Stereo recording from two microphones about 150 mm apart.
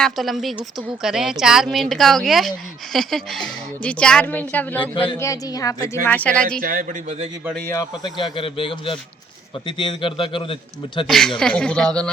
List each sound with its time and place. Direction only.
0.0 s a woman's voice: centre (ahead or behind); by 6.0 s 25° left (ahead or behind)
6.1 s a woman's voice: 10° left (ahead or behind)
6.6 s a man's voice: 70° right (ahead or behind)
7.7 s a man's voice: 25° left (ahead or behind)
11.0 s speech: centre (ahead or behind)